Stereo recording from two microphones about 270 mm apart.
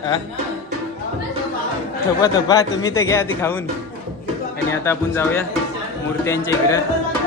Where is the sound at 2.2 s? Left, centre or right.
Centre.